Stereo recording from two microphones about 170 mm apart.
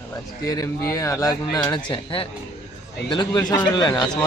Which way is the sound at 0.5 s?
20° left (ahead or behind).